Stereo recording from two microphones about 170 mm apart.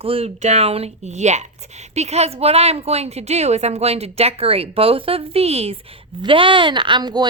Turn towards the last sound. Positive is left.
turn(degrees=-25)  # may be behind; listen again after turning